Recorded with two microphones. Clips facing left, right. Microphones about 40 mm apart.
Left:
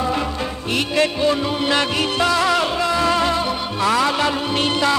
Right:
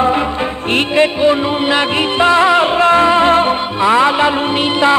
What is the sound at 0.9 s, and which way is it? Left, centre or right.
Music, right.